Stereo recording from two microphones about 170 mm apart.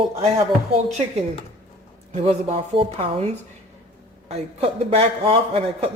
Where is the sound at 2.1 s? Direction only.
35° right (ahead or behind).